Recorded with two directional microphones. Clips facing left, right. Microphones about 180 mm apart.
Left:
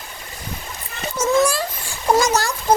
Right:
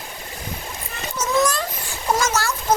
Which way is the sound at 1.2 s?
10° left (ahead or behind).